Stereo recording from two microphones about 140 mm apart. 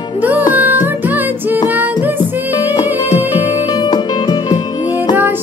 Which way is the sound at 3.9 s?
30° left (ahead or behind).